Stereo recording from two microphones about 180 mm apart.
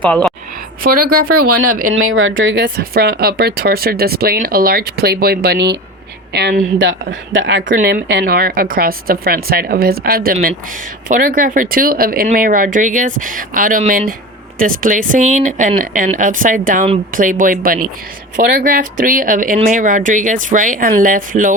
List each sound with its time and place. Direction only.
0.1 s a woman's voice: 5° left (ahead or behind)
1.9 s speech: 90° right
2.6 s speech: 55° right (ahead or behind); by 7.6 s 90° right
7.7 s speech: 50° right (ahead or behind)